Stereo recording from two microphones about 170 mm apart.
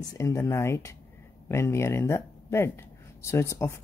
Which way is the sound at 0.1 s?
20° left (ahead or behind).